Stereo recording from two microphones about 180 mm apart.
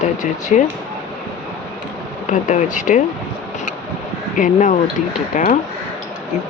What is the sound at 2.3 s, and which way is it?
Speech, 45° left (ahead or behind).